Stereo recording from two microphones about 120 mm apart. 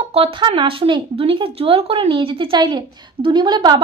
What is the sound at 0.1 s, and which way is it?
A woman's voice, 50° right (ahead or behind).